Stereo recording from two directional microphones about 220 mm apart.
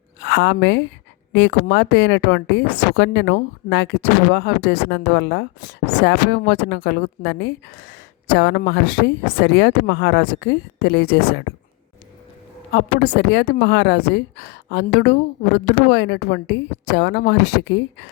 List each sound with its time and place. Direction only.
0.2 s a woman's voice: 50° left (ahead or behind)
12.7 s a woman's voice: 45° left (ahead or behind)